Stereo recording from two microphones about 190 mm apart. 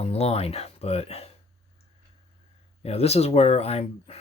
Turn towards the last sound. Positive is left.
turn(degrees=30)  # may be behind; listen again after turning